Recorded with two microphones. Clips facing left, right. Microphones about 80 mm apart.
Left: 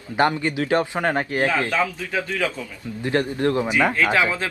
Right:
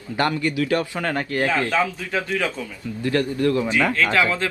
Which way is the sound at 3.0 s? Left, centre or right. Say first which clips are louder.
Right 1 dB; left.